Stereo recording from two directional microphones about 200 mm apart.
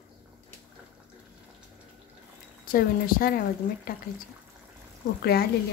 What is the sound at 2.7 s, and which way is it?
Speech, 45° left (ahead or behind).